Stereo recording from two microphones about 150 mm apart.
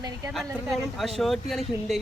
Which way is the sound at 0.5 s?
5° right (ahead or behind).